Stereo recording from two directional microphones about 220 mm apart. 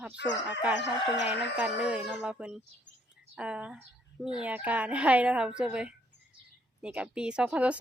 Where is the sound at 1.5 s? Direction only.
5° right (ahead or behind).